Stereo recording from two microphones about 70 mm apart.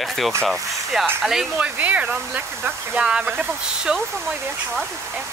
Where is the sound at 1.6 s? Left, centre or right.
Right.